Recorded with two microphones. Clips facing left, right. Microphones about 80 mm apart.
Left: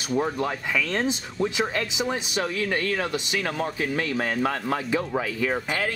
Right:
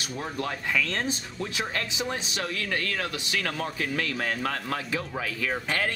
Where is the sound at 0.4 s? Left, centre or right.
Centre.